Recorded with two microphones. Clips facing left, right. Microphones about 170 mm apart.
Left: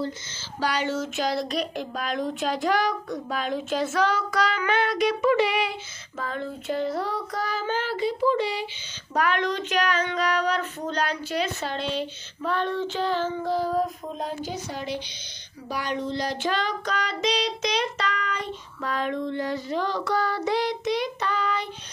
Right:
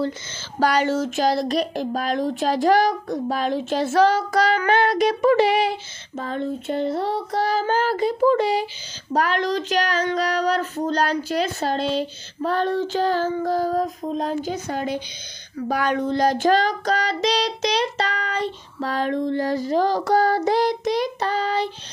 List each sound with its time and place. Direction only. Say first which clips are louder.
0.6 s speech: right 7 dB; 45° right (ahead or behind); by 7.2 s 25° right (ahead or behind)
7.3 s child singing: right 8 dB; 35° right (ahead or behind)
9.1 s speech: right 3 dB; 35° right (ahead or behind)